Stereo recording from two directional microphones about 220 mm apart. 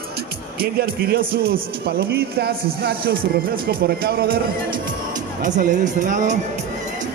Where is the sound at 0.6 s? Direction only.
45° right (ahead or behind).